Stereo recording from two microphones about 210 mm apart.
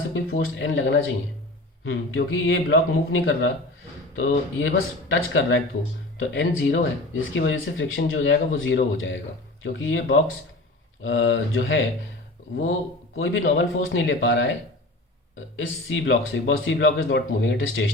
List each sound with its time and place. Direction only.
0.1 s a man's voice: 70° left (ahead or behind)
13.1 s speech: 65° left (ahead or behind)
15.5 s speech: 65° left (ahead or behind)